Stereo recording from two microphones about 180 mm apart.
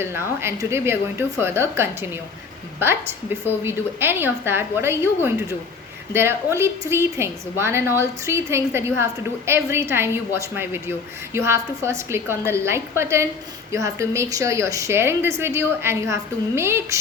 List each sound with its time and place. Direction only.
0.0 s a woman's voice: 15° right (ahead or behind)